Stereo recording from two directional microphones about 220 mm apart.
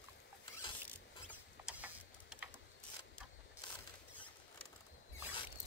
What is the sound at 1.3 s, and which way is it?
Rodents, 5° right (ahead or behind).